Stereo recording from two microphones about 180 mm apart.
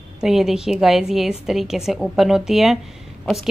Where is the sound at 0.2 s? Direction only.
Centre (ahead or behind).